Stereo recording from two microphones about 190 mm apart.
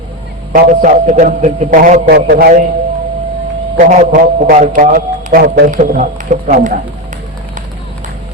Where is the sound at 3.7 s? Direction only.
40° right (ahead or behind).